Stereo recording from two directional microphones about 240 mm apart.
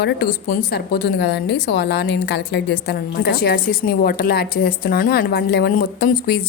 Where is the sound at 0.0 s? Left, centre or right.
Left.